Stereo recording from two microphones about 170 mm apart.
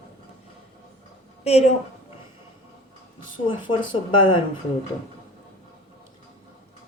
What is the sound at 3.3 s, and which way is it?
Speech, 30° left (ahead or behind).